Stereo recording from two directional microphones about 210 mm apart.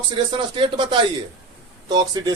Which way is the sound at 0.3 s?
25° right (ahead or behind).